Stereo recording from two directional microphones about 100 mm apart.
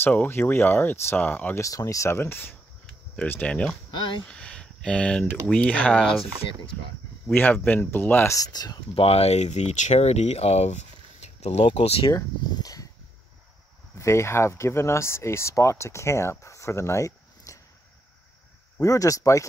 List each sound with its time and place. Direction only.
0.0 s speech: 20° left (ahead or behind)
1.6 s speech: 35° left (ahead or behind); by 3.7 s 10° left (ahead or behind)
3.9 s speech: 55° left (ahead or behind)
4.3 s a sound: 10° left (ahead or behind)
5.5 s speech: 15° left (ahead or behind)
7.3 s speech: 15° left (ahead or behind)
8.4 s speech: 40° left (ahead or behind)
8.9 s speech: 90° left; by 12.1 s 70° left (ahead or behind)
12.5 s a sound: 35° left (ahead or behind)
13.9 s speech: 30° left (ahead or behind)
18.8 s speech: 35° left (ahead or behind)